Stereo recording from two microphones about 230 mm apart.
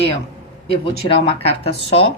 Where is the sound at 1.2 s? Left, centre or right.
Left.